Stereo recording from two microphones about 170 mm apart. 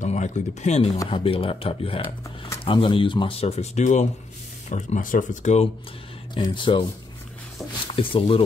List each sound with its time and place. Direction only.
0.0 s speech: 45° left (ahead or behind)
6.3 s speech: 30° left (ahead or behind)
7.9 s speech: 30° left (ahead or behind)